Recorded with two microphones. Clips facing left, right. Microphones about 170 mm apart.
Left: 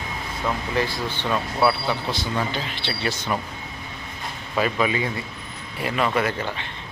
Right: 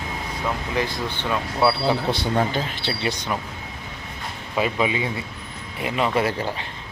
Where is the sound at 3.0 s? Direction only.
15° right (ahead or behind).